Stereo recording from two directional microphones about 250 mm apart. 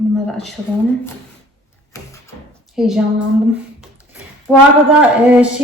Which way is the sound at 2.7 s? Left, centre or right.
Centre.